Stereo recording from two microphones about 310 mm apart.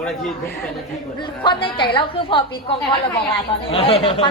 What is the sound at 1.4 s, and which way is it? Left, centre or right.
A woman's voice, centre.